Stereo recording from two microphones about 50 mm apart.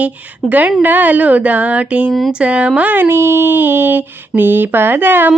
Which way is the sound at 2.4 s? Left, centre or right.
Right.